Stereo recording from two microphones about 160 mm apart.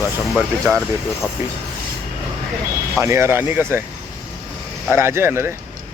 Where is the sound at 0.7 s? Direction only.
10° right (ahead or behind).